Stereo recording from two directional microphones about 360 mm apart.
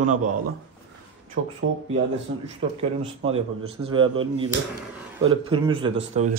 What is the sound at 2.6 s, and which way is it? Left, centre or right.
Speech, centre.